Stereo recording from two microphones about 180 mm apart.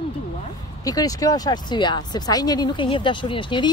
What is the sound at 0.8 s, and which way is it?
Speech, 20° left (ahead or behind).